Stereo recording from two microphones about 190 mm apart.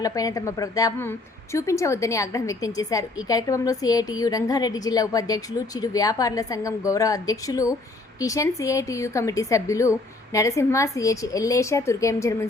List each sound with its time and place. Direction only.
0.0 s a woman's voice: 20° left (ahead or behind)